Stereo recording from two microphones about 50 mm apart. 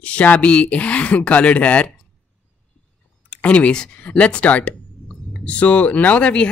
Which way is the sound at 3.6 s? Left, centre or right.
Centre.